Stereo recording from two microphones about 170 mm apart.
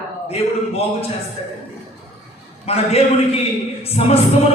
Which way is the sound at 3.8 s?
35° left (ahead or behind).